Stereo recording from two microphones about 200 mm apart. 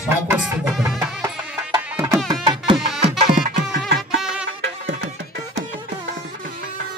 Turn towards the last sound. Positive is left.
turn(degrees=-60)  # may be behind; listen again after turning